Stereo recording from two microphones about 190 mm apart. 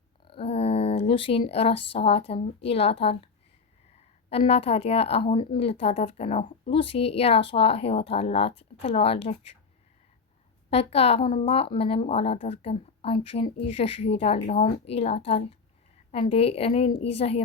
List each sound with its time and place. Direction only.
0.3 s speech: 30° left (ahead or behind)
4.3 s speech: 30° left (ahead or behind)
10.7 s speech: 30° left (ahead or behind)